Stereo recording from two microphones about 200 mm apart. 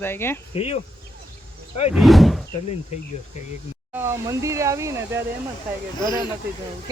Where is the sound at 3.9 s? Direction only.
15° right (ahead or behind).